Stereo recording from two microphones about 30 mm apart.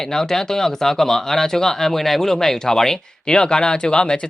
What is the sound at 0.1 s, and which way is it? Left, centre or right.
Speech, centre.